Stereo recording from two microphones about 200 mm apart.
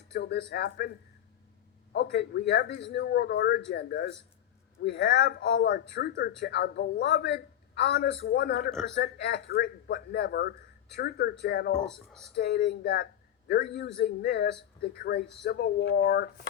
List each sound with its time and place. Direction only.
0.1 s speech: 55° left (ahead or behind)
1.9 s speech: 55° left (ahead or behind)
11.9 s speech: centre (ahead or behind)
12.4 s speech: 55° left (ahead or behind)